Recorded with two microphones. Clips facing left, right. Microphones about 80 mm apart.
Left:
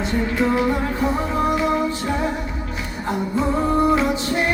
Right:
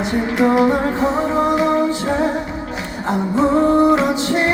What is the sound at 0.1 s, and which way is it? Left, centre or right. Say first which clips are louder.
Music: right 5 dB; centre.